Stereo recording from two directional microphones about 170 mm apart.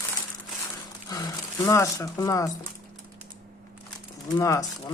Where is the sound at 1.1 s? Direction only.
20° left (ahead or behind).